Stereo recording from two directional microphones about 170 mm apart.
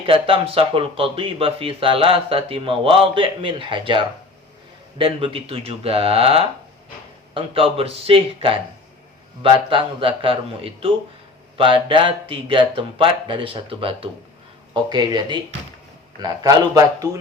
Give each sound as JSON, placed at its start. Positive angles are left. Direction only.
{"t": 0.0, "sound": "a man's voice", "side_deg": -30}